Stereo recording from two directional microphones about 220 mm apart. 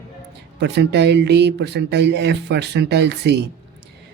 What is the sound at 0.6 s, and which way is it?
Speech, 50° right (ahead or behind).